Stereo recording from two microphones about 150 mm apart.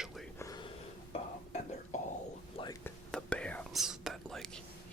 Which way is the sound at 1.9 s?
55° left (ahead or behind).